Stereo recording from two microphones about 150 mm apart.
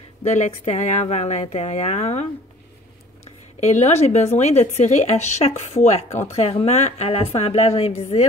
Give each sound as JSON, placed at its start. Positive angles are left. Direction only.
{"t": 0.2, "sound": "speech", "side_deg": 50}
{"t": 3.6, "sound": "speech", "side_deg": 45}